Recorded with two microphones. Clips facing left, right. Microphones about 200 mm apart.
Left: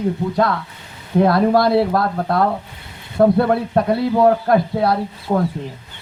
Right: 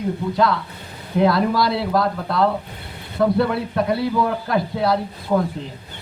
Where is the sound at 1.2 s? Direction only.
55° left (ahead or behind).